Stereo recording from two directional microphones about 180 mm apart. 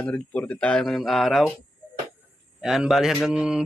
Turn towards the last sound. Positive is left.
turn(degrees=-5)  # may be behind; listen again after turning